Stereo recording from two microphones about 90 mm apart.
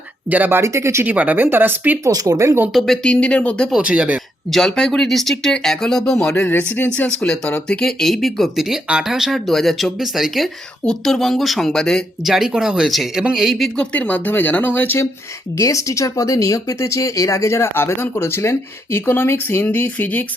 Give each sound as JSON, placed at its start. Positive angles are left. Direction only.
{"t": 0.3, "sound": "speech", "side_deg": -20}
{"t": 0.6, "sound": "speech", "side_deg": -30}
{"t": 1.0, "sound": "speech", "side_deg": -15}
{"t": 2.0, "sound": "speech", "side_deg": -45}
{"t": 2.7, "sound": "speech", "side_deg": 5}
{"t": 3.7, "sound": "speech", "side_deg": -10}
{"t": 4.4, "sound": "speech", "side_deg": 5}
{"t": 6.4, "sound": "speech", "side_deg": 20}
{"t": 13.9, "sound": "speech", "side_deg": 15}
{"t": 15.5, "sound": "speech", "side_deg": 35}